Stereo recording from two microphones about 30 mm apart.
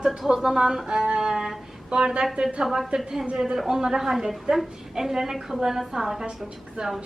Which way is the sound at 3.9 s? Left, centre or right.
Centre.